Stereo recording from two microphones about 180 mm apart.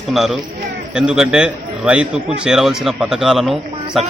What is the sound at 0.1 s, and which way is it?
A man's voice, centre (ahead or behind).